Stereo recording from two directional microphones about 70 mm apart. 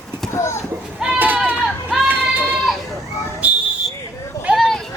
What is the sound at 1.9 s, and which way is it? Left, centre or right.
Child singing, centre.